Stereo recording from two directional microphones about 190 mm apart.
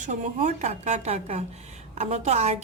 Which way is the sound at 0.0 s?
40° right (ahead or behind).